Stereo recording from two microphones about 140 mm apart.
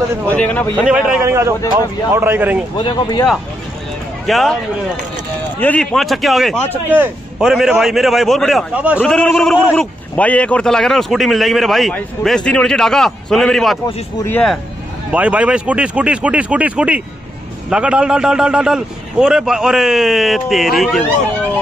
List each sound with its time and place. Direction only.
0.3 s speech: 10° left (ahead or behind)
0.8 s speech: 10° right (ahead or behind)
1.2 s speech: 20° right (ahead or behind)
2.8 s speech: 30° left (ahead or behind)
4.3 s a man's voice: centre (ahead or behind)
5.6 s a man's voice: 10° left (ahead or behind)
8.7 s speech: 10° right (ahead or behind)
9.0 s a man's voice: 5° left (ahead or behind)
14.2 s speech: 15° left (ahead or behind)
15.1 s a man's voice: 10° right (ahead or behind)